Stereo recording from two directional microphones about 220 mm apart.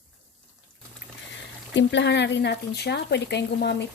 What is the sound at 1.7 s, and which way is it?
Speech, 55° left (ahead or behind).